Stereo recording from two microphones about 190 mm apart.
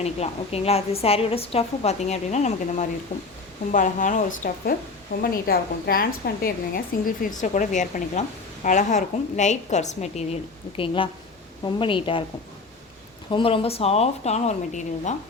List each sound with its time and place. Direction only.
0.0 s a woman's voice: 35° left (ahead or behind)
13.3 s a woman's voice: 30° left (ahead or behind)